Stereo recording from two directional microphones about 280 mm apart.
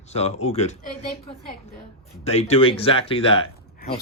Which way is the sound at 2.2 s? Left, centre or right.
Left.